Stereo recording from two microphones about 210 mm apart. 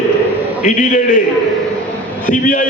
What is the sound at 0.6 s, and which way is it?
Speech, 35° left (ahead or behind).